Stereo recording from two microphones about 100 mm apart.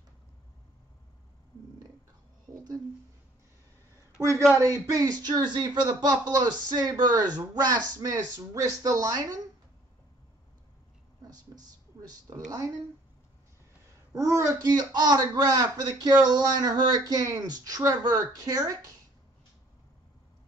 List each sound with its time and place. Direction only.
4.2 s speech: 30° right (ahead or behind)
12.3 s speech: 40° right (ahead or behind)
14.1 s speech: 30° right (ahead or behind)